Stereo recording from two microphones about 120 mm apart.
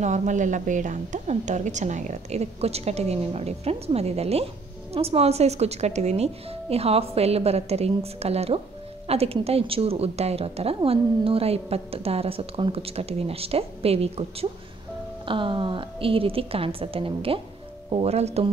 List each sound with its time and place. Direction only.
0.0 s a woman's voice: 80° right; by 14.5 s 55° right (ahead or behind)
15.2 s a woman's voice: 45° right (ahead or behind); by 18.5 s 60° right (ahead or behind)